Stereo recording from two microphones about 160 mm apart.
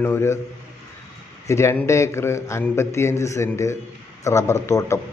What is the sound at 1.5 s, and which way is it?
A man's voice, 15° left (ahead or behind).